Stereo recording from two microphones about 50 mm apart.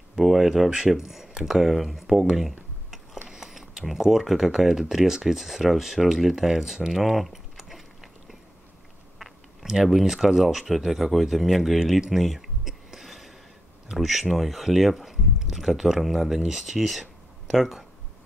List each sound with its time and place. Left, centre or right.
0.1 s speech: centre
12.1 s a sound: centre
13.8 s speech: centre